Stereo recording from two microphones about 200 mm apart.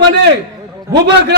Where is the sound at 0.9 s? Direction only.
60° right (ahead or behind).